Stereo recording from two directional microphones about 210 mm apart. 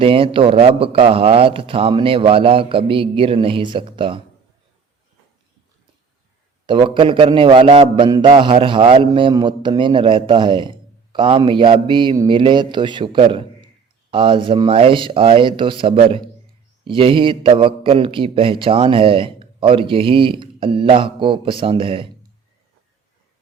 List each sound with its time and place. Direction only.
0.0 s a man's voice: 25° right (ahead or behind)
6.7 s a man's voice: 25° right (ahead or behind)